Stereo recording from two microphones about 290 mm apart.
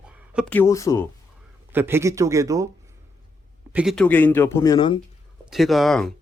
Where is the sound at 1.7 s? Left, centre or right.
Centre.